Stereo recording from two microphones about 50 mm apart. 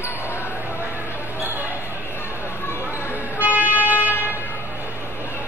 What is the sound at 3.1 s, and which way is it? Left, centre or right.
Music, right.